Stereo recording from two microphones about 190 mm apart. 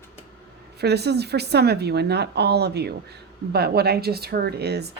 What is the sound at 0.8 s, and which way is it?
A woman's voice, 60° right (ahead or behind).